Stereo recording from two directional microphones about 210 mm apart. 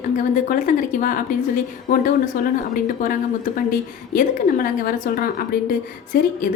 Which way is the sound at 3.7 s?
40° left (ahead or behind).